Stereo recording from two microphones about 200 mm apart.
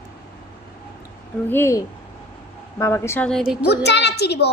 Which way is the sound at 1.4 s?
10° left (ahead or behind).